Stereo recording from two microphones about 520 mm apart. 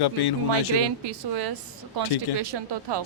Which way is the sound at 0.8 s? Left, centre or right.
Right.